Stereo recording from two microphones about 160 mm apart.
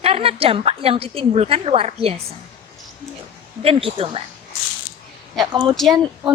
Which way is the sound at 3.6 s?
35° right (ahead or behind).